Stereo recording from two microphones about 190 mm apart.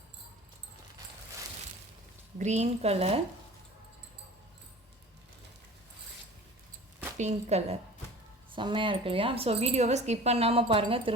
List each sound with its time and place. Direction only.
2.4 s speech: 35° right (ahead or behind)
7.2 s a woman's voice: 35° right (ahead or behind)